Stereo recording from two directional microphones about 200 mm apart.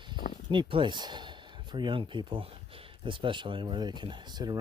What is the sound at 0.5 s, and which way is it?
Speech, 25° right (ahead or behind).